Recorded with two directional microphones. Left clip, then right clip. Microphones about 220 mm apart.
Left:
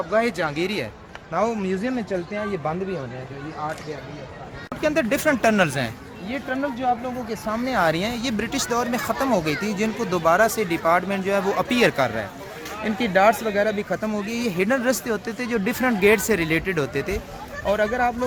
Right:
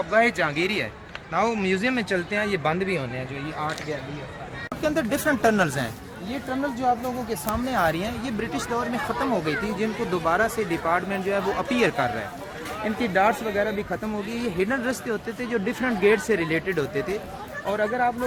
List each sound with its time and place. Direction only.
0.1 s speech: 40° left (ahead or behind); by 2.1 s 15° left (ahead or behind)
2.1 s speech: centre (ahead or behind)
4.8 s speech: 35° left (ahead or behind)
7.5 s speech: 30° left (ahead or behind); by 18.1 s 50° left (ahead or behind)